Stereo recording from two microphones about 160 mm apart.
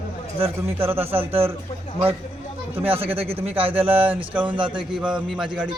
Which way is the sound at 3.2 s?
35° right (ahead or behind).